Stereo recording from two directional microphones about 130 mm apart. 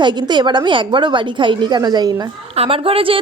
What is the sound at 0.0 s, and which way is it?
A woman's voice, 35° right (ahead or behind).